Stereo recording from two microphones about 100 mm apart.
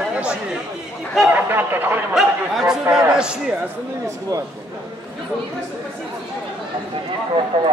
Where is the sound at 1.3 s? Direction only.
20° right (ahead or behind).